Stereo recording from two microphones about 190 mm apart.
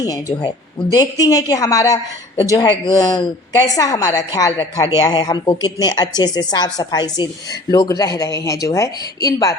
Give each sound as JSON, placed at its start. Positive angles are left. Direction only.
{"t": 0.0, "sound": "a woman's voice", "side_deg": 20}